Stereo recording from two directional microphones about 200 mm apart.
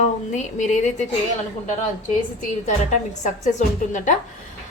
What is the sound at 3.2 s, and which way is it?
Speech, 40° left (ahead or behind).